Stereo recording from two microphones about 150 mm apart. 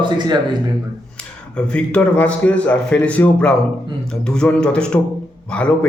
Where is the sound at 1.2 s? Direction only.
5° left (ahead or behind).